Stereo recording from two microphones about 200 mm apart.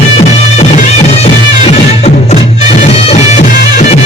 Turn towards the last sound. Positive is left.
turn(degrees=35)  # may be behind; listen again after turning